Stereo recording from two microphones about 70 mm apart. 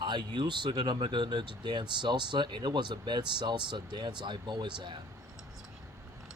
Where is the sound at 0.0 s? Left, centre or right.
Right.